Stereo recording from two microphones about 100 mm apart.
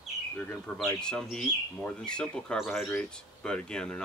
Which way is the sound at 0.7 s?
20° left (ahead or behind).